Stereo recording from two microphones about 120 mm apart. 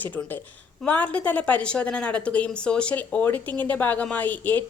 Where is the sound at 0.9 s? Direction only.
10° left (ahead or behind).